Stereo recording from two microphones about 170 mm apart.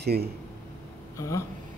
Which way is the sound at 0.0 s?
70° right (ahead or behind).